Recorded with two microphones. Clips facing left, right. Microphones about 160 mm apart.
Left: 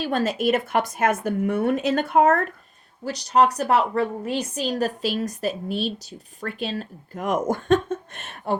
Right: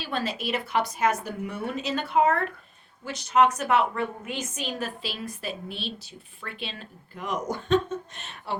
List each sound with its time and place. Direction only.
0.0 s a woman's voice: 45° left (ahead or behind)